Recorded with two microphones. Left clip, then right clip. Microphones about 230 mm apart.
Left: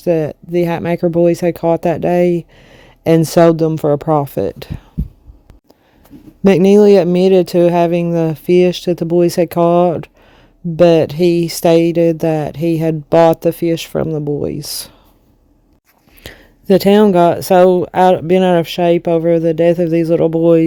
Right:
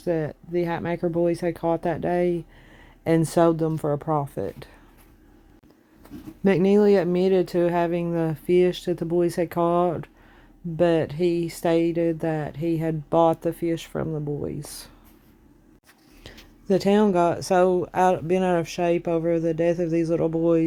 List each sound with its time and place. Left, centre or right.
0.0 s speech: left
6.4 s speech: left
16.2 s speech: left